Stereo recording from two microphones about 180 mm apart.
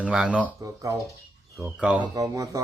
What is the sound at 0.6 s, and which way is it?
Speech, 20° right (ahead or behind).